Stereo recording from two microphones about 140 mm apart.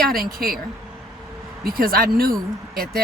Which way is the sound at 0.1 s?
90° right.